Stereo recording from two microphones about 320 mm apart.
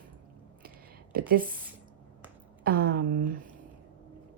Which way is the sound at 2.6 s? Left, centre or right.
Right.